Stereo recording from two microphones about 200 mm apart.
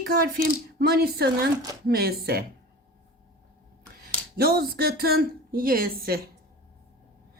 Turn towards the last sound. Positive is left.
turn(degrees=-50)  # may be behind; listen again after turning